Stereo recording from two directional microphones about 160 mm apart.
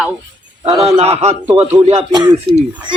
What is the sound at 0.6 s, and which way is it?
Speech, 35° right (ahead or behind).